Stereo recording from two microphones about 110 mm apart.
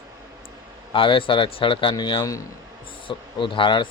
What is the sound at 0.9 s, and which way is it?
Speech, 50° left (ahead or behind).